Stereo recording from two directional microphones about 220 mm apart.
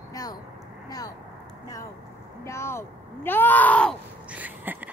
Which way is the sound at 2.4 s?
10° left (ahead or behind).